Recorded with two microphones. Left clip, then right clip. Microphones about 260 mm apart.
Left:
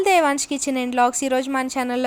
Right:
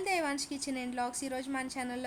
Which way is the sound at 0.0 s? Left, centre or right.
Left.